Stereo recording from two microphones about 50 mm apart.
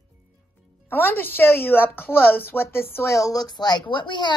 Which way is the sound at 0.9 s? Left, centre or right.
Left.